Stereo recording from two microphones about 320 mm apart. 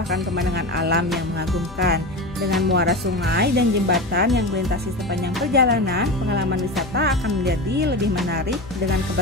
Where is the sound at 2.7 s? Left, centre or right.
Right.